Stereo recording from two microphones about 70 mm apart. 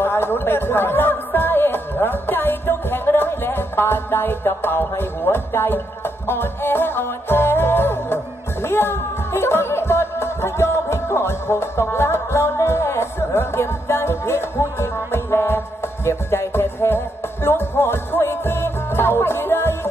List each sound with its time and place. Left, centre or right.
0.0 s speech: left
16.1 s music: left